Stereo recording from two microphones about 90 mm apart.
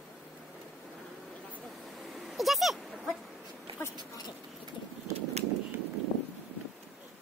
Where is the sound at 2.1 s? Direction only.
Centre (ahead or behind).